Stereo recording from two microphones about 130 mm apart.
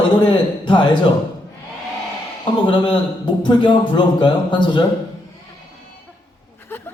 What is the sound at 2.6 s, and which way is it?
A man's voice, 40° left (ahead or behind).